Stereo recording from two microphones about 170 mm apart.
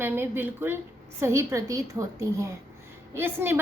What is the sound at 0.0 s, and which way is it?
A woman's voice, 10° right (ahead or behind).